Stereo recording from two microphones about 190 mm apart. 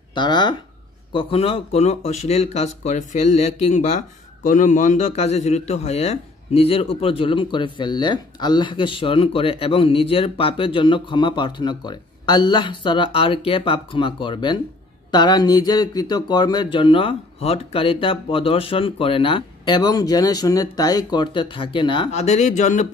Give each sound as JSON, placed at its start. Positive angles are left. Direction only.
{"t": 0.1, "sound": "a man's voice", "side_deg": 25}
{"t": 22.1, "sound": "speech", "side_deg": 35}